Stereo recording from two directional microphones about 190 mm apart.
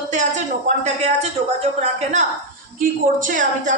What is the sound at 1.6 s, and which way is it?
A woman's voice, 35° right (ahead or behind).